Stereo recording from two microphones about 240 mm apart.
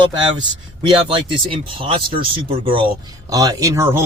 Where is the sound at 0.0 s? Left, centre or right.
Centre.